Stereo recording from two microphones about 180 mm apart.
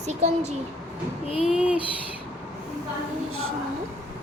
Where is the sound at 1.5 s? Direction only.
5° right (ahead or behind).